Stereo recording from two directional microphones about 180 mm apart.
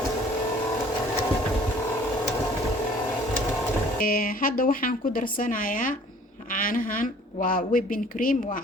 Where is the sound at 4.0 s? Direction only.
50° left (ahead or behind).